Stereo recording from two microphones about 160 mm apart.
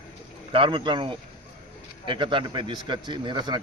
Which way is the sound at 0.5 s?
30° right (ahead or behind).